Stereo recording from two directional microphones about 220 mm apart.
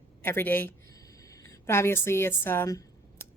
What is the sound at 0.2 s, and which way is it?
A woman's voice, 10° left (ahead or behind).